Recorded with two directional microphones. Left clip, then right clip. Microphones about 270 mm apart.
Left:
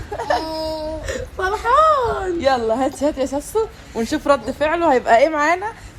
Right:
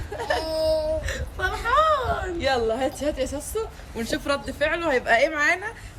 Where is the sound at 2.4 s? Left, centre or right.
Centre.